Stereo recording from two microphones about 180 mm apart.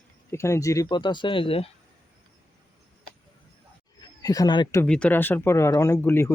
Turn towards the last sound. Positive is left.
turn(degrees=15)  # may be behind; listen again after turning